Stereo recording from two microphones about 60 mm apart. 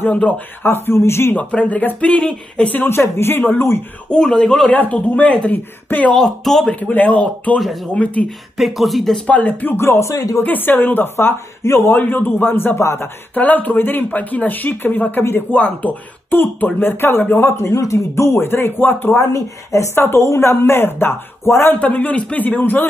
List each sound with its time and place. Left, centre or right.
0.7 s speech: left
1.3 s a man's voice: left
2.9 s speech: left
4.1 s a man's voice: centre
6.1 s speech: centre
6.8 s a man's voice: left
8.5 s speech: centre
9.3 s a man's voice: left
9.8 s speech: left
10.4 s speech: left
13.3 s speech: left
17.5 s speech: left
19.3 s speech: left
21.7 s a man's voice: left